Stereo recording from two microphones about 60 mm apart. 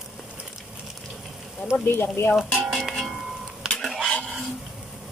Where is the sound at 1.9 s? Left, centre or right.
Left.